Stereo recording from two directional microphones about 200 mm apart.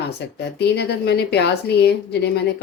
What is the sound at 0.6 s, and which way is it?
A woman's voice, 55° left (ahead or behind).